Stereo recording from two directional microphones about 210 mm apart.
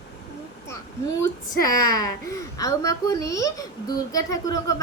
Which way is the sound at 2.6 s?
15° left (ahead or behind).